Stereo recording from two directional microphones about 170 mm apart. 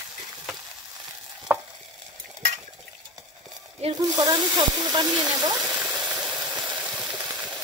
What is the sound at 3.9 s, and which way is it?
Speech, 25° right (ahead or behind).